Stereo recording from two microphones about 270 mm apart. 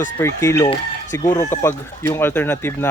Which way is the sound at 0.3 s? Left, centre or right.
Centre.